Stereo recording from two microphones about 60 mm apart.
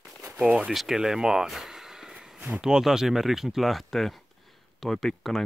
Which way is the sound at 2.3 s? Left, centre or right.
Right.